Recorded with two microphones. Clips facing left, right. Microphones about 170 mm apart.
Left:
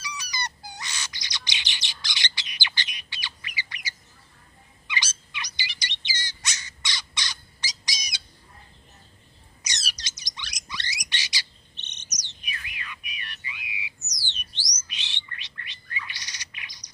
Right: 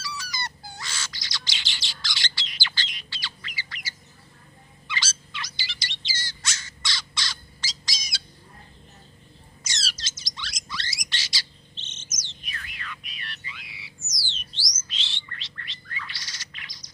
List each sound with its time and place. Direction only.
0.0 s bird: 15° left (ahead or behind)
4.9 s bird: 15° left (ahead or behind)
9.6 s bird: 15° left (ahead or behind)
12.5 s music: 15° left (ahead or behind)
14.3 s bird: 15° left (ahead or behind)